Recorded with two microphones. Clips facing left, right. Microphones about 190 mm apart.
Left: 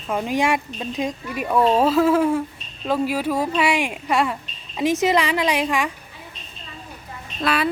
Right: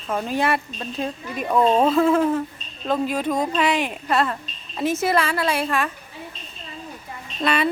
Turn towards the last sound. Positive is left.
turn(degrees=0)  # may be behind; listen again after turning